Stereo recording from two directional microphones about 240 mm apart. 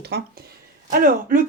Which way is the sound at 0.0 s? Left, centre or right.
Right.